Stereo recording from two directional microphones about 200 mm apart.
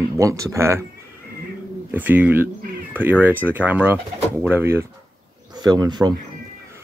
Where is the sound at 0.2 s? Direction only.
15° right (ahead or behind).